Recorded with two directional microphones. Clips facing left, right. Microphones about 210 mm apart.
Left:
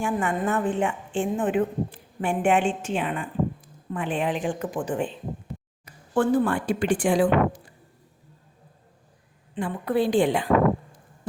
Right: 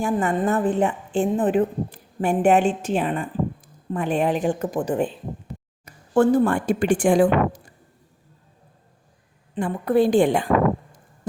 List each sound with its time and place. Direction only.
0.0 s a woman's voice: 40° right (ahead or behind)
9.6 s a woman's voice: 45° right (ahead or behind)